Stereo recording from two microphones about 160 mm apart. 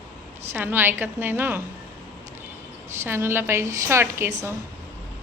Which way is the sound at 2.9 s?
15° right (ahead or behind).